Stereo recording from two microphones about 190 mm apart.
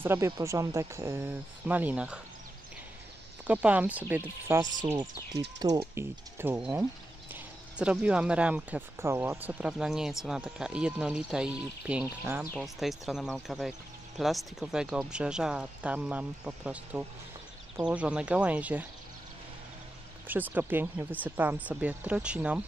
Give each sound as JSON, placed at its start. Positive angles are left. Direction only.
{"t": 0.0, "sound": "speech", "side_deg": -15}
{"t": 3.4, "sound": "speech", "side_deg": -10}
{"t": 5.9, "sound": "speech", "side_deg": -10}
{"t": 20.2, "sound": "speech", "side_deg": -10}